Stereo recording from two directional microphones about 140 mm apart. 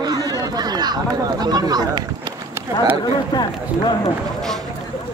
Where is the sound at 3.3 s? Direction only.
35° left (ahead or behind).